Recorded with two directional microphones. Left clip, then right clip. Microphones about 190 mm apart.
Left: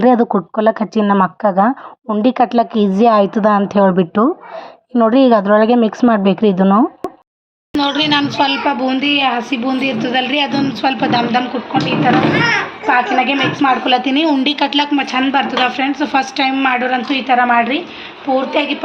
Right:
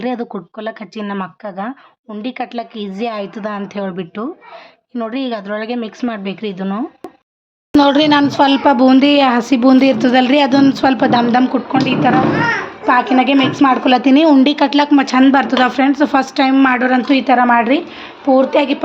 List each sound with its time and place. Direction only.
0.0 s a woman's voice: 20° left (ahead or behind)
7.7 s speech: 55° right (ahead or behind)
12.9 s speech: 70° right (ahead or behind)